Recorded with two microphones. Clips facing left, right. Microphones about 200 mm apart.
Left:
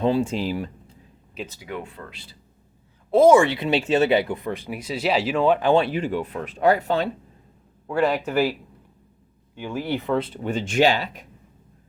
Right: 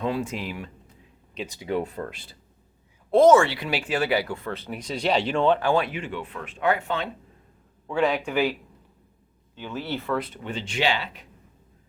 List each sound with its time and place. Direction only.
0.0 s speech: 30° left (ahead or behind)
1.6 s speech: 35° right (ahead or behind)
3.1 s speech: 10° left (ahead or behind)
5.5 s speech: 25° left (ahead or behind); by 7.1 s 40° left (ahead or behind)
7.9 s speech: 5° left (ahead or behind)
9.6 s speech: 10° left (ahead or behind)
10.2 s speech: 30° left (ahead or behind)
10.4 s speech: 45° left (ahead or behind)